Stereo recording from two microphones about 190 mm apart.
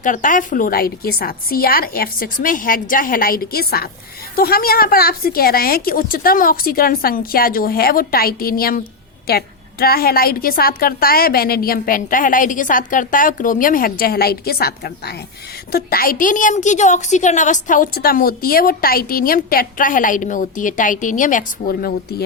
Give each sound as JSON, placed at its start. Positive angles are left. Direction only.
{"t": 0.0, "sound": "a woman's voice", "side_deg": 45}